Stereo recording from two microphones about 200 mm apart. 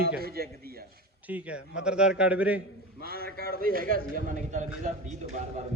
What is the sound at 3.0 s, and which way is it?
A man's voice, 50° right (ahead or behind).